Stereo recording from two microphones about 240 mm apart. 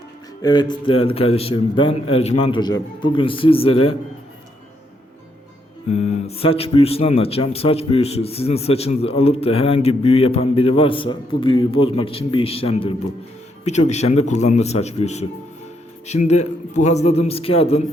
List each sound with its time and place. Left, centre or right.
0.4 s speech: centre
5.9 s speech: left